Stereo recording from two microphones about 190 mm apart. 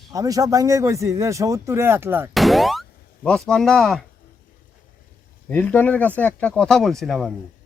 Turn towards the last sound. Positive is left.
turn(degrees=0)  # may be behind; listen again after turning